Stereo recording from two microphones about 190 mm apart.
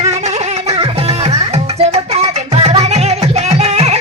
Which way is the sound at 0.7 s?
30° right (ahead or behind).